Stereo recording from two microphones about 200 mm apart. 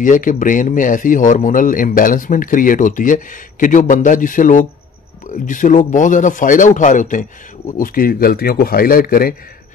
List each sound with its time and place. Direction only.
0.0 s a man's voice: 40° left (ahead or behind)